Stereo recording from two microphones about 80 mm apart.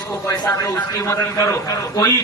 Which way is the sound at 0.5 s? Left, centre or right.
Left.